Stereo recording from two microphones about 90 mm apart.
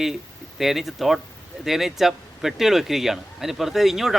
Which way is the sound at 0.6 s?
5° right (ahead or behind).